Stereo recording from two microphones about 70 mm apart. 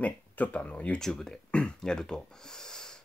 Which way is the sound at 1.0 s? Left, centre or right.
Centre.